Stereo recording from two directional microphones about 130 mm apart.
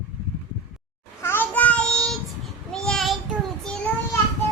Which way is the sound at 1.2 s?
15° left (ahead or behind).